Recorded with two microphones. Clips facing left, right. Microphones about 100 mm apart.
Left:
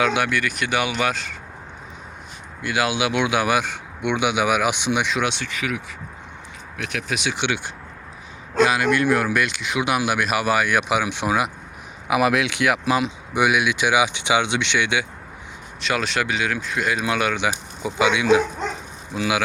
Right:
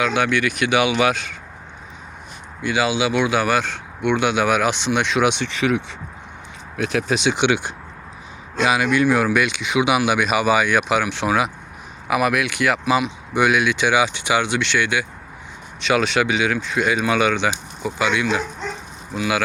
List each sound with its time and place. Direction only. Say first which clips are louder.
0.5 s speech: right 5 dB; centre (ahead or behind)
2.6 s speech: right 2 dB; 10° left (ahead or behind)
5.2 s speech: right 6 dB; 20° right (ahead or behind)
8.6 s speech: right 1 dB; 5° right (ahead or behind)
12.0 s speech: even; 20° left (ahead or behind)
15.8 s speech: right 5 dB; centre (ahead or behind)
17.8 s speech: left 3 dB; 15° left (ahead or behind)